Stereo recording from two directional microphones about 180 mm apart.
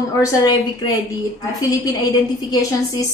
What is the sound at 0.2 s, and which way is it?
Speech, 20° left (ahead or behind).